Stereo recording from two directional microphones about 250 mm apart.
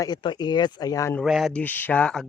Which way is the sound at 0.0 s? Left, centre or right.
Centre.